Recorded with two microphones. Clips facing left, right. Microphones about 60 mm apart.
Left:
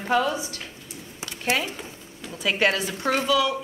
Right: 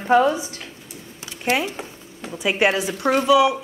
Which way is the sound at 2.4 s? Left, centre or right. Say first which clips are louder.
Right 3 dB; centre.